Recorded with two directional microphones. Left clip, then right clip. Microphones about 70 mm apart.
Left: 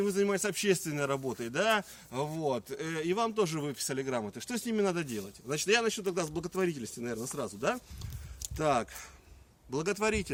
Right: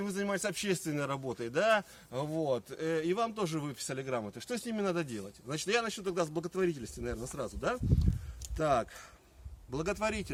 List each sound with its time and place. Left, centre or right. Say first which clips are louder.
0.0 s a man's voice: left 5 dB; right